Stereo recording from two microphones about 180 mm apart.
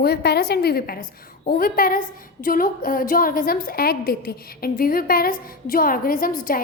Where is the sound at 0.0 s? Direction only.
60° left (ahead or behind).